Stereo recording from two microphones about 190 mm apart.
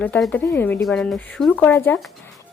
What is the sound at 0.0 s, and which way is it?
Speech, 5° left (ahead or behind).